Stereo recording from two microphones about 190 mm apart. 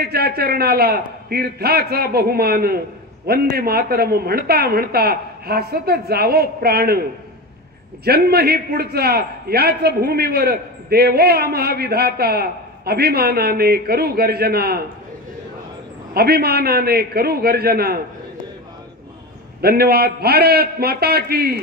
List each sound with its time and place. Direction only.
0.0 s a man's voice: 55° right (ahead or behind)
16.1 s a man's voice: 55° right (ahead or behind)
19.6 s a man's voice: 55° right (ahead or behind)